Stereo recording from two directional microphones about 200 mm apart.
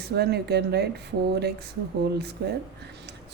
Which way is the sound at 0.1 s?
55° right (ahead or behind).